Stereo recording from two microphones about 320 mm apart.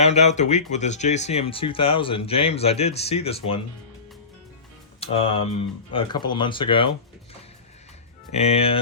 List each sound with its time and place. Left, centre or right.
0.0 s speech: centre
4.9 s speech: centre
8.3 s speech: centre